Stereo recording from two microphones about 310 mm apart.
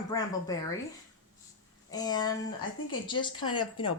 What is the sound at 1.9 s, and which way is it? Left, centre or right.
Speech, centre.